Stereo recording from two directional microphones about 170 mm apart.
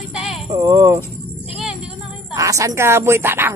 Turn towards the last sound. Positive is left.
turn(degrees=-15)  # may be behind; listen again after turning